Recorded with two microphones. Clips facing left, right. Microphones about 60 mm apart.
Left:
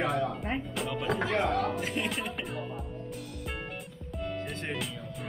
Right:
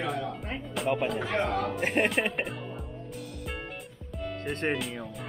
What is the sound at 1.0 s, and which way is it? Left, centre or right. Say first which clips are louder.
Speech: even; left.